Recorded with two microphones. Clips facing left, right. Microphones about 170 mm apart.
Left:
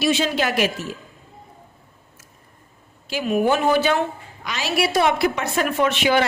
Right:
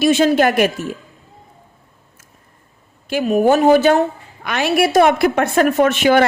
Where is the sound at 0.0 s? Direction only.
50° right (ahead or behind).